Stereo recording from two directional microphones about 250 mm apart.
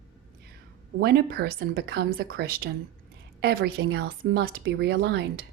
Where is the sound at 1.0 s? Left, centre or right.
Right.